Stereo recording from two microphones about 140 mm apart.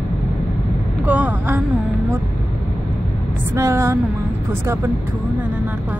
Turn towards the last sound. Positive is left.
turn(degrees=-20)  # may be behind; listen again after turning